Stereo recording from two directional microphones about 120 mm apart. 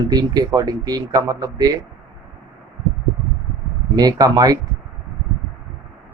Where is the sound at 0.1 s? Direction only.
35° right (ahead or behind).